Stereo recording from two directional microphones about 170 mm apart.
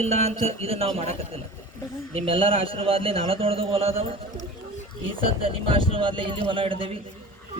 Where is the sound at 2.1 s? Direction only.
35° right (ahead or behind).